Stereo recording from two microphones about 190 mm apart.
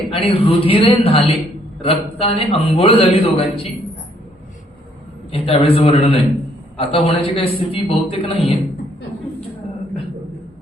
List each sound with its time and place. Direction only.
0.1 s a man's voice: 30° left (ahead or behind)
5.3 s a man's voice: 30° left (ahead or behind)